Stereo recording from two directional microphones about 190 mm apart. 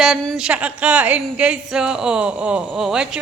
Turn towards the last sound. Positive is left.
turn(degrees=-5)  # may be behind; listen again after turning